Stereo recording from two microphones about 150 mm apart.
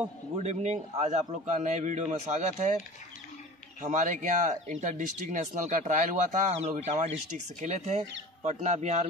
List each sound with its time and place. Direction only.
0.4 s a man's voice: 50° right (ahead or behind)
3.8 s a man's voice: 55° right (ahead or behind)